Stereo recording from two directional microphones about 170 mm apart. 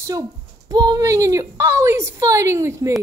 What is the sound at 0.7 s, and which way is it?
A woman's voice, 20° right (ahead or behind).